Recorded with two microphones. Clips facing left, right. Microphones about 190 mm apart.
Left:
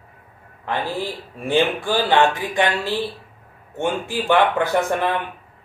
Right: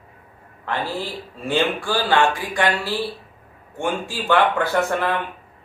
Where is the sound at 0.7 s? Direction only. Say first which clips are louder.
Left 1 dB; 15° left (ahead or behind).